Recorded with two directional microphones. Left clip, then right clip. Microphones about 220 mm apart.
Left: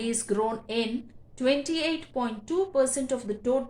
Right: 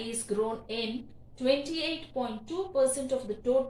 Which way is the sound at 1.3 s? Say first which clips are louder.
Left 2 dB; 50° left (ahead or behind).